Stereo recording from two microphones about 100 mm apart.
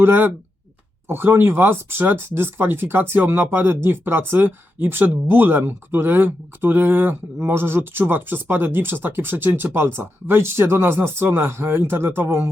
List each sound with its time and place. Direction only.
0.0 s speech: 20° right (ahead or behind)